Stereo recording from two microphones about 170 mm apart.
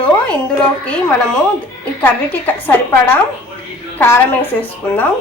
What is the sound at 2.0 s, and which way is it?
A woman's voice, 10° left (ahead or behind).